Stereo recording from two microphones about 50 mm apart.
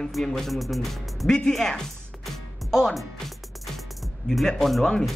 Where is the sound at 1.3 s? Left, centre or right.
Centre.